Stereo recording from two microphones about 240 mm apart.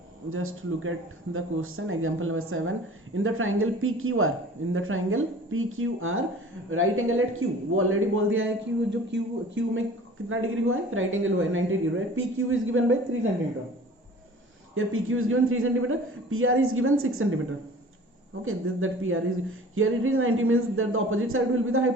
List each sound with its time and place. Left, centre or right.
0.3 s a man's voice: right
14.8 s speech: right
18.4 s speech: right